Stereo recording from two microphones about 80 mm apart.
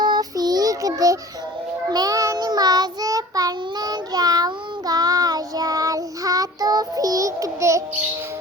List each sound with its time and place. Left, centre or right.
0.0 s child singing: right